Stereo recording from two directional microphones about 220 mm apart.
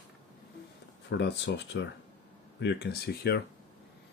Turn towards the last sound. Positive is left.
turn(degrees=45)  # may be behind; listen again after turning